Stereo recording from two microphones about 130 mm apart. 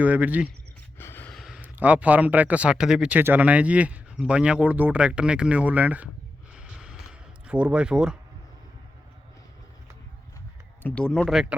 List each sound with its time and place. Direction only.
0.0 s speech: 10° right (ahead or behind)
0.9 s gasp: 15° left (ahead or behind)
1.3 s a sound: centre (ahead or behind)
1.6 s speech: 10° right (ahead or behind)
6.5 s a sound: 5° right (ahead or behind)
10.8 s speech: 5° left (ahead or behind)